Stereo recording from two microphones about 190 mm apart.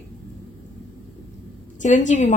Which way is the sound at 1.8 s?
40° left (ahead or behind).